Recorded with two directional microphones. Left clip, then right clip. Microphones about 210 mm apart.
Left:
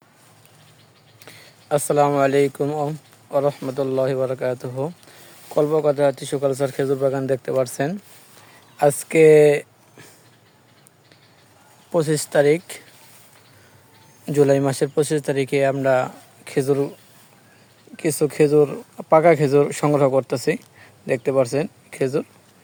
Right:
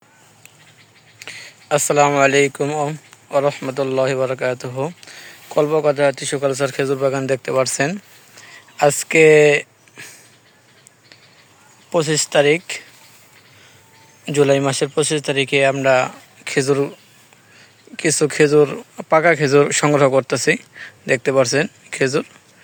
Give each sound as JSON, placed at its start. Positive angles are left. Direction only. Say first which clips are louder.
{"t": 1.2, "sound": "speech", "louder": "right 10 dB", "side_deg": 0}
{"t": 4.9, "sound": "a sound", "louder": "right 9 dB", "side_deg": 0}
{"t": 5.5, "sound": "speech", "louder": "right 2 dB", "side_deg": 0}
{"t": 11.9, "sound": "speech", "louder": "right 3 dB", "side_deg": 10}
{"t": 14.3, "sound": "speech", "louder": "right 2 dB", "side_deg": 10}
{"t": 17.9, "sound": "speech", "louder": "right 3 dB", "side_deg": 0}